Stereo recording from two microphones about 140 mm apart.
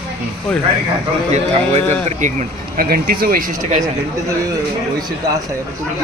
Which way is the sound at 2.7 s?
90° right.